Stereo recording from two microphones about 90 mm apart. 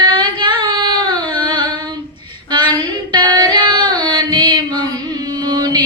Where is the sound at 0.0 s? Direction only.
60° right (ahead or behind).